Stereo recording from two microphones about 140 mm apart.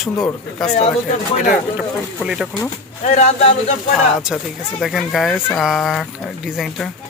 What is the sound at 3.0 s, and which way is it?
Speech, 55° left (ahead or behind).